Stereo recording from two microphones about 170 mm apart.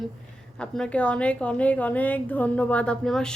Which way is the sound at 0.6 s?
5° left (ahead or behind).